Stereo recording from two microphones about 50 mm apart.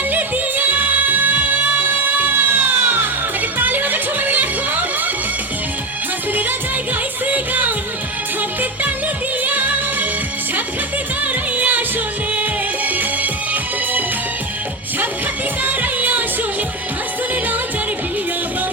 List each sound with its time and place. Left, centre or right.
0.1 s music: right
2.3 s music: right
7.3 s music: right
9.4 s music: right
11.2 s music: right
15.6 s music: right